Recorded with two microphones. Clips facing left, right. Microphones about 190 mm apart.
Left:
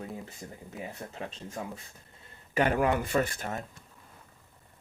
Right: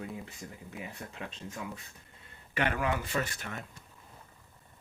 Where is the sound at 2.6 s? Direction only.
45° left (ahead or behind).